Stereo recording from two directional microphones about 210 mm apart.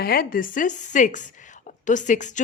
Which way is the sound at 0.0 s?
45° left (ahead or behind).